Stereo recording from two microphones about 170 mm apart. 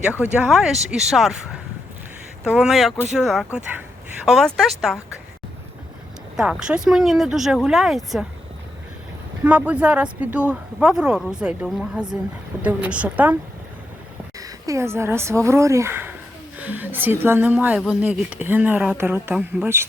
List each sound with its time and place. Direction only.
0.0 s speech: 5° right (ahead or behind)
6.3 s speech: 5° right (ahead or behind)
9.4 s a woman's voice: 10° right (ahead or behind)
14.3 s a woman's voice: 20° right (ahead or behind)